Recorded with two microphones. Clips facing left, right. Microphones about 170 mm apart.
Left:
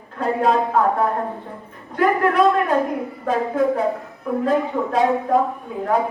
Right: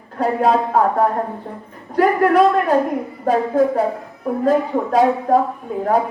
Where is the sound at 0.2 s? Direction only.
40° right (ahead or behind).